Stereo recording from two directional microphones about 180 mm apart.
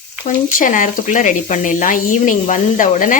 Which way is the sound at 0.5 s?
45° left (ahead or behind).